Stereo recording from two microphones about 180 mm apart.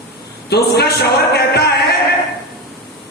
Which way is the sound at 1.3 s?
65° left (ahead or behind).